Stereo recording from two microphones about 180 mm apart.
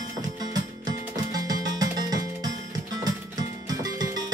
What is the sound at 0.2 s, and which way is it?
Music, 20° right (ahead or behind).